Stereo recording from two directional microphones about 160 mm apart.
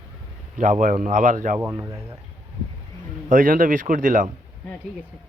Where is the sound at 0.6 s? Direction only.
50° right (ahead or behind).